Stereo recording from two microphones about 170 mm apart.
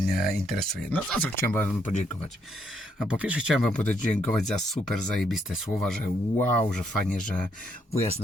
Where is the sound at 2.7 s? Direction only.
5° right (ahead or behind).